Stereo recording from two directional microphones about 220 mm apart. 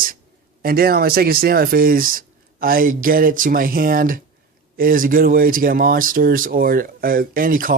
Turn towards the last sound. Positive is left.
turn(degrees=-40)  # may be behind; listen again after turning